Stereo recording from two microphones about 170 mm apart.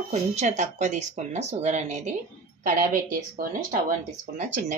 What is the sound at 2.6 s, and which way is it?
Speech, 55° right (ahead or behind).